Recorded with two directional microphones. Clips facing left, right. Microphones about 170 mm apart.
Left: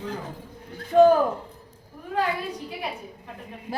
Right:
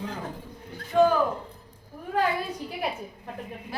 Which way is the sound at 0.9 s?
45° left (ahead or behind).